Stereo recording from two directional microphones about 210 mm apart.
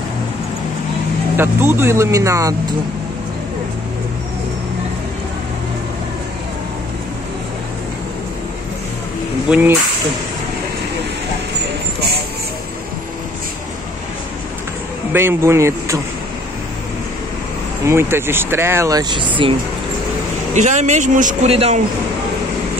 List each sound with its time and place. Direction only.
1.3 s speech: 10° right (ahead or behind)
9.5 s speech: 10° right (ahead or behind)
15.1 s speech: 10° right (ahead or behind)
17.8 s speech: 10° right (ahead or behind)
20.5 s speech: 35° right (ahead or behind)